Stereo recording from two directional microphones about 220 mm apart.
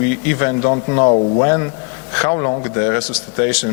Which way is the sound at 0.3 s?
20° left (ahead or behind).